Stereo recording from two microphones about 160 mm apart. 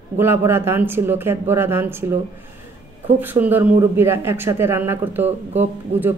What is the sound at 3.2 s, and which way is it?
A man's voice, 10° right (ahead or behind).